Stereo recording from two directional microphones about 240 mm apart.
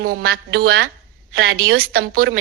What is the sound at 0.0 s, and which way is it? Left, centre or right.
A woman's voice, right.